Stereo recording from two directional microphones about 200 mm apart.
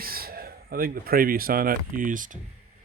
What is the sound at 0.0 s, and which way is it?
Speech, 50° right (ahead or behind).